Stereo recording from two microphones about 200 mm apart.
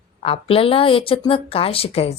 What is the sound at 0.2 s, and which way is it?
Speech, 30° left (ahead or behind).